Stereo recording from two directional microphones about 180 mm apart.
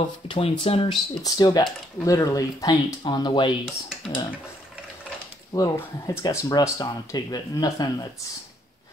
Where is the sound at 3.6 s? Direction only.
5° right (ahead or behind).